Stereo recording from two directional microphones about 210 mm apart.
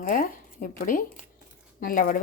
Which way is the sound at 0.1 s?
40° left (ahead or behind).